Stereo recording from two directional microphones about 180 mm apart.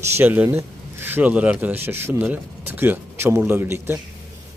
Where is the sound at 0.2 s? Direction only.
10° right (ahead or behind).